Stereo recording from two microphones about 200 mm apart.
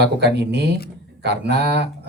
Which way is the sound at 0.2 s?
55° right (ahead or behind).